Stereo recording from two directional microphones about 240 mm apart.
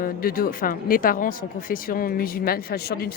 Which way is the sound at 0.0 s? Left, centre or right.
Left.